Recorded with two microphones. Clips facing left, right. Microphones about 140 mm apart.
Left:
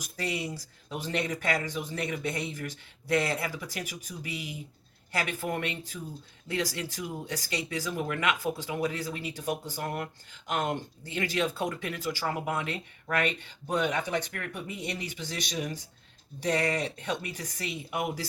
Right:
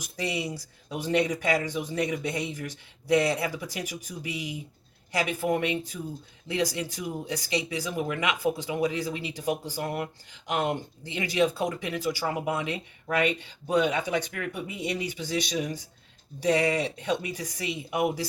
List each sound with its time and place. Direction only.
0.0 s speech: 15° right (ahead or behind)